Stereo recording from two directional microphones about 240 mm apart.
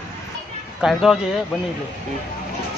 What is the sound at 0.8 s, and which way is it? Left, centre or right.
Speech, centre.